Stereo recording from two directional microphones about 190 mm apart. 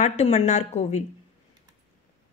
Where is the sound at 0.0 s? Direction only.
35° left (ahead or behind).